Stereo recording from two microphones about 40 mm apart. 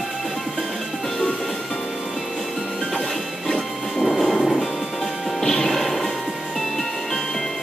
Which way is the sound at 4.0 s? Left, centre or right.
Centre.